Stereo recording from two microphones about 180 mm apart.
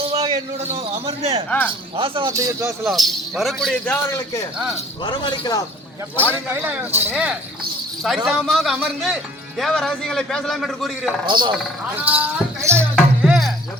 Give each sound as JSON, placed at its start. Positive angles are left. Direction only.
{"t": 0.0, "sound": "a man's voice", "side_deg": -30}
{"t": 1.5, "sound": "speech", "side_deg": 10}
{"t": 2.0, "sound": "a man's voice", "side_deg": -25}
{"t": 2.9, "sound": "a man's voice", "side_deg": 0}
{"t": 5.0, "sound": "a man's voice", "side_deg": 25}
{"t": 6.5, "sound": "a man's voice", "side_deg": -10}
{"t": 11.3, "sound": "speech", "side_deg": -25}
{"t": 11.5, "sound": "speech", "side_deg": -10}
{"t": 13.2, "sound": "music", "side_deg": 0}